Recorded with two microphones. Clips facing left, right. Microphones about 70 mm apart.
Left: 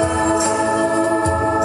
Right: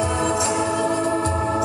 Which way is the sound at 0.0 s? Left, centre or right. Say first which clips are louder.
Left 5 dB; left.